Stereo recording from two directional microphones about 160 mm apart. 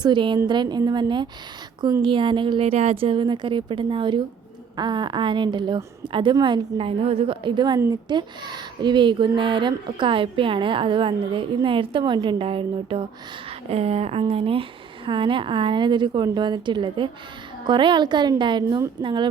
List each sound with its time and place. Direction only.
0.0 s a woman's voice: 30° right (ahead or behind)